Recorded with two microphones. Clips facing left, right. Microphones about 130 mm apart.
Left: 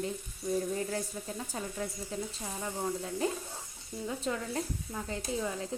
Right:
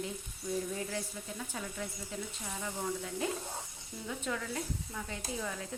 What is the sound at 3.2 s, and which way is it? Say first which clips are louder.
Speech: left 3 dB; 35° left (ahead or behind).